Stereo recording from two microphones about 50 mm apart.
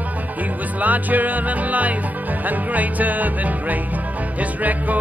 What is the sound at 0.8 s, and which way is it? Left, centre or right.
Music, right.